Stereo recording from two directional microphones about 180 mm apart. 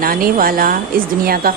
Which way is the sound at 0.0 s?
55° right (ahead or behind).